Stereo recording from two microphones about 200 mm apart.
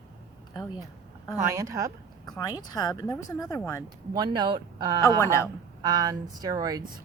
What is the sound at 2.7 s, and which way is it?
Speech, 20° left (ahead or behind).